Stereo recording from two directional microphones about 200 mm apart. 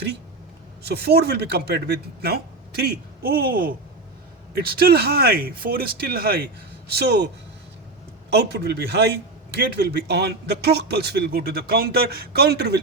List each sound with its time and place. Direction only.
0.9 s a man's voice: 55° right (ahead or behind)
8.3 s a man's voice: 55° right (ahead or behind)